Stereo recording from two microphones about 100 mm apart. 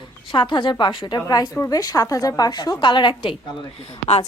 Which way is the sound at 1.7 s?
35° left (ahead or behind).